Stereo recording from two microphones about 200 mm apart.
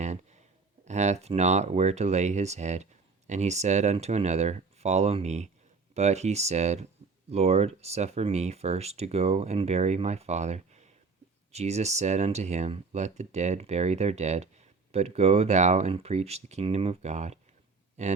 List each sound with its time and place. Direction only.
0.9 s speech: 35° right (ahead or behind)